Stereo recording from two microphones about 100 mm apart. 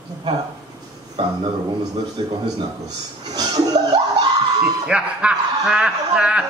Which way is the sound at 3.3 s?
40° right (ahead or behind).